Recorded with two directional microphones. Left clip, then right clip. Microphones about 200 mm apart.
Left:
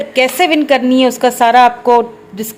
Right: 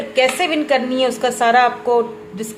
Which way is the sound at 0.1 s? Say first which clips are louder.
Left 4 dB; 40° left (ahead or behind).